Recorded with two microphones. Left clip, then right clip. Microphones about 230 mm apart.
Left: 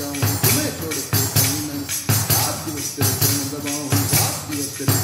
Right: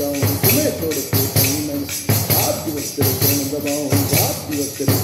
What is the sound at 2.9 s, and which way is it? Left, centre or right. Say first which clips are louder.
Music: right 2 dB; centre.